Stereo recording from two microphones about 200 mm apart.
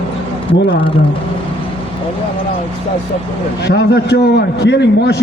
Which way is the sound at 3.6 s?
60° left (ahead or behind).